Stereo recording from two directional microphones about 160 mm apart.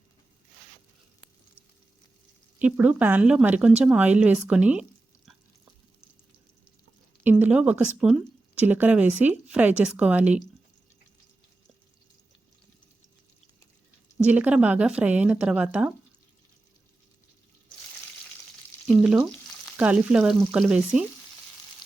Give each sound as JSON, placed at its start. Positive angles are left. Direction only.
{"t": 2.6, "sound": "speech", "side_deg": -10}
{"t": 7.3, "sound": "speech", "side_deg": -10}
{"t": 14.3, "sound": "speech", "side_deg": -10}
{"t": 19.7, "sound": "speech", "side_deg": -10}